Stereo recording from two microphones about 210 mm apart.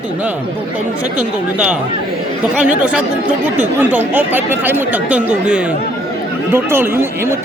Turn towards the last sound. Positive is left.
turn(degrees=-10)  # may be behind; listen again after turning